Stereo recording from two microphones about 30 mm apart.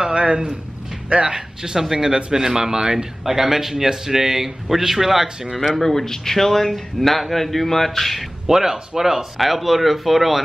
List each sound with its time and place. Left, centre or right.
0.1 s a sound: right
1.1 s speech: right
1.6 s speech: centre
3.3 s a man's voice: centre
5.8 s a man's voice: centre
8.5 s speech: centre